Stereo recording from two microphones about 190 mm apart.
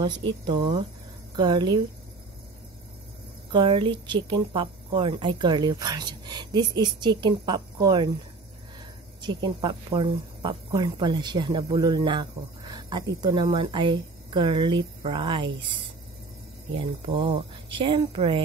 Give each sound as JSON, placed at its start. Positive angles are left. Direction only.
{"t": 0.2, "sound": "a woman's voice", "side_deg": -25}
{"t": 3.5, "sound": "a woman's voice", "side_deg": -25}
{"t": 9.2, "sound": "a woman's voice", "side_deg": -25}